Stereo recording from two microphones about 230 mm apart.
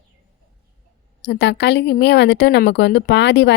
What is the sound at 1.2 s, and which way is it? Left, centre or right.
A woman's voice, left.